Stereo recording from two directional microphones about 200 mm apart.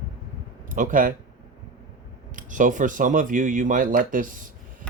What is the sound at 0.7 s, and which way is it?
Speech, 40° right (ahead or behind).